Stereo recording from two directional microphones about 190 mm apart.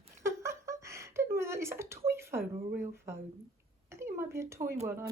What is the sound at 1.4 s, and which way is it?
Speech, 15° right (ahead or behind).